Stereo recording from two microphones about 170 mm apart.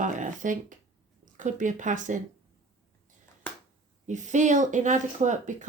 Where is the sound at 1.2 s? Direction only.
45° right (ahead or behind).